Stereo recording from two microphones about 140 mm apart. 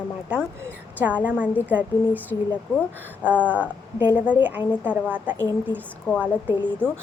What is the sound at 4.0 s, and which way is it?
Speech, 15° right (ahead or behind).